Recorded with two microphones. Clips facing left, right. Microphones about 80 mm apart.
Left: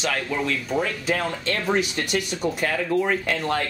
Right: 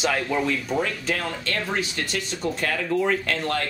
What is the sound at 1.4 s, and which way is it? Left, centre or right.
Speech, left.